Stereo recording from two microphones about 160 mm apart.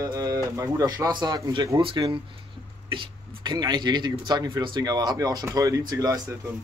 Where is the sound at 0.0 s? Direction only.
20° right (ahead or behind).